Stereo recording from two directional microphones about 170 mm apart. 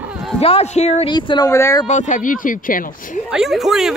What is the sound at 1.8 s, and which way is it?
Speech, 45° left (ahead or behind).